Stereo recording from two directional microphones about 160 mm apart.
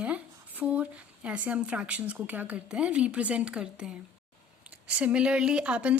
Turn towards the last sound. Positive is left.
turn(degrees=-5)  # may be behind; listen again after turning